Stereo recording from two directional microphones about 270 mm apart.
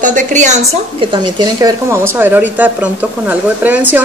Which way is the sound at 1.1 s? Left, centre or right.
Centre.